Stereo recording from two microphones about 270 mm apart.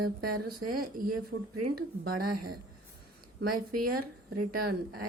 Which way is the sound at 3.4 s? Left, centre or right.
Right.